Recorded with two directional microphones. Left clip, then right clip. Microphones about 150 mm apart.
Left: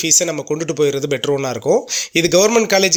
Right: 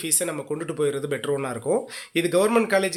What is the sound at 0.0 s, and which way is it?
Speech, 45° left (ahead or behind).